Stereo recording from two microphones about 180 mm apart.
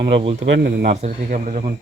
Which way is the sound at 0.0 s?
30° right (ahead or behind).